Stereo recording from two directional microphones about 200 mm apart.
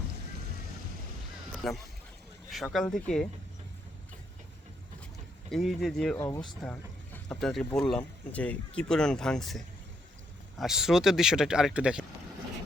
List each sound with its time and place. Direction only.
1.5 s speech: centre (ahead or behind)
5.5 s speech: centre (ahead or behind)
6.1 s speech: 15° left (ahead or behind); by 12.0 s 5° right (ahead or behind)